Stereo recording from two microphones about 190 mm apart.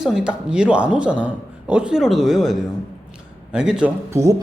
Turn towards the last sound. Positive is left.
turn(degrees=-15)  # may be behind; listen again after turning